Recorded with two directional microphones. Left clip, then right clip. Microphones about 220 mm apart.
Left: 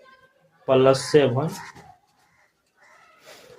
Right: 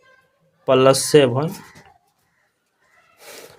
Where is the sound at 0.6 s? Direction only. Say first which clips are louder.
Right 3 dB; 40° right (ahead or behind).